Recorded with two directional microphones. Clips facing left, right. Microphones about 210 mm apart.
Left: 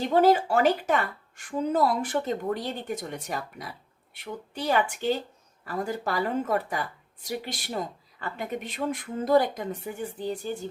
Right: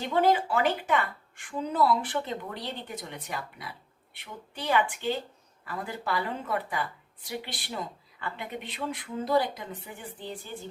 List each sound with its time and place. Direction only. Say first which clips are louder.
0.0 s speech: left 4 dB; 40° left (ahead or behind)